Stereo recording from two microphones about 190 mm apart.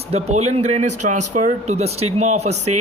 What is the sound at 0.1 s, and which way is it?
Speech, 35° right (ahead or behind).